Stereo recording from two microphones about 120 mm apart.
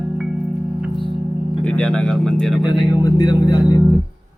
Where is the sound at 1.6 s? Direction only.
5° left (ahead or behind).